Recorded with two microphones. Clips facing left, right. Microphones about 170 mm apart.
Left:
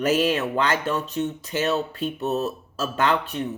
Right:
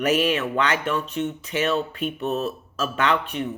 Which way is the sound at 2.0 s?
40° left (ahead or behind).